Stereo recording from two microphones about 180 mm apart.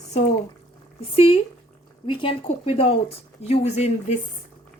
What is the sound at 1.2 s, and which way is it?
Speech, 30° left (ahead or behind).